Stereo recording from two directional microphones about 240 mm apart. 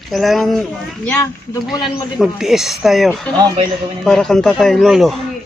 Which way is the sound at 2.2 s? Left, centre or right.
Centre.